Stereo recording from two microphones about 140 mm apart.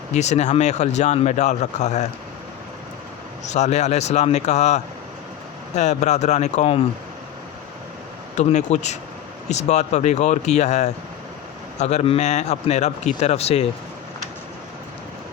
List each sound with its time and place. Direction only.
0.1 s speech: 55° left (ahead or behind)
3.5 s speech: 55° left (ahead or behind)
8.4 s speech: 55° left (ahead or behind)